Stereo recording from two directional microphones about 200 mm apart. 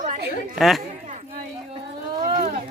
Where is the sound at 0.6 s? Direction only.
Centre (ahead or behind).